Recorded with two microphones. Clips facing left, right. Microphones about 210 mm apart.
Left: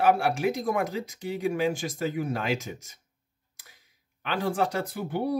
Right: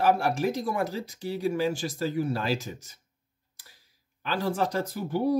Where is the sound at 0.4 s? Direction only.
35° right (ahead or behind).